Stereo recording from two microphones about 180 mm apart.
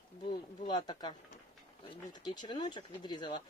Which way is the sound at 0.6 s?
25° left (ahead or behind).